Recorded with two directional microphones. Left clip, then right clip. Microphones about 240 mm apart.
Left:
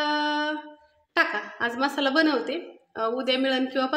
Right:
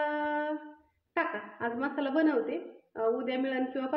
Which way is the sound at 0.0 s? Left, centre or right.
Centre.